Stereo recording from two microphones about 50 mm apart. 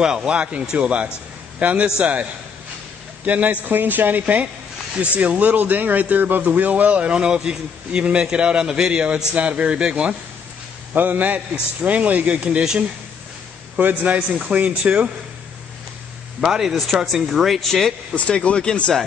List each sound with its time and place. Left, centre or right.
0.0 s speech: centre
3.3 s a woman's voice: right
10.9 s a woman's voice: right
13.7 s a woman's voice: right
16.3 s speech: centre
18.1 s speech: left